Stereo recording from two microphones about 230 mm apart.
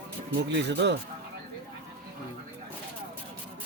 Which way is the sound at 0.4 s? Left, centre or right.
Right.